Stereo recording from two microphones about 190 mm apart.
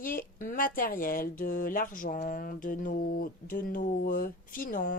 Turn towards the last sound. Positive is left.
turn(degrees=45)  # may be behind; listen again after turning